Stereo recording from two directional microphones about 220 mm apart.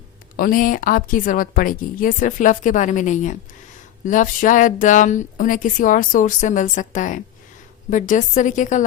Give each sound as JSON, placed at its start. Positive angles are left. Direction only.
{"t": 0.3, "sound": "speech", "side_deg": 40}